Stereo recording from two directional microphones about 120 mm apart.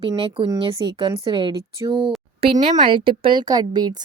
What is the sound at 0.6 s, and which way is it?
Speech, 50° right (ahead or behind).